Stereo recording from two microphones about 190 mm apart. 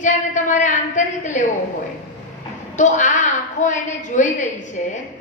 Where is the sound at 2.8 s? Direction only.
40° left (ahead or behind).